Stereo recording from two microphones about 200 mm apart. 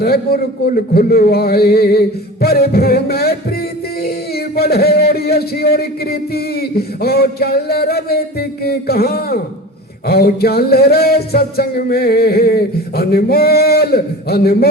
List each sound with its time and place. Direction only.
0.0 s speech: 50° left (ahead or behind)